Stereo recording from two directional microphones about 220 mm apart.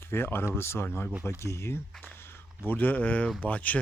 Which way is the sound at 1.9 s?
5° left (ahead or behind).